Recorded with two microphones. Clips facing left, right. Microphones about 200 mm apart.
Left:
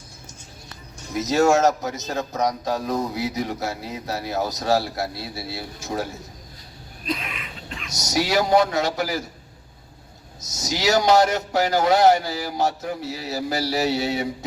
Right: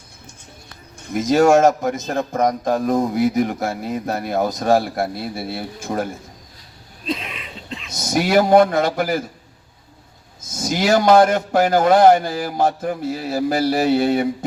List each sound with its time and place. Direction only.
0.9 s a man's voice: 55° right (ahead or behind)
7.0 s a sound: 30° right (ahead or behind)
7.9 s a man's voice: 55° right (ahead or behind)
10.5 s a man's voice: 55° right (ahead or behind)